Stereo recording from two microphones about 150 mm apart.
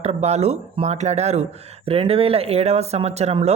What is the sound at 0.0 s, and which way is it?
Speech, 45° right (ahead or behind).